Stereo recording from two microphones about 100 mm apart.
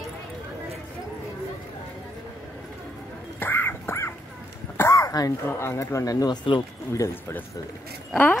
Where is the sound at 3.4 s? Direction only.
20° left (ahead or behind).